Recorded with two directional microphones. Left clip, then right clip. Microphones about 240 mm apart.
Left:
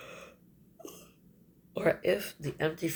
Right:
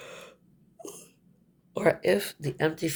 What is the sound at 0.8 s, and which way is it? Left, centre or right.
Hiccup, right.